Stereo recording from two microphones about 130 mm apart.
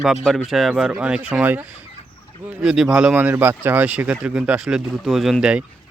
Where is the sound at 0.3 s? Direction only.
Centre (ahead or behind).